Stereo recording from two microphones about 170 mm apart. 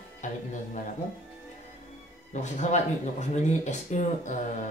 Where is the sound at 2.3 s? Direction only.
45° left (ahead or behind).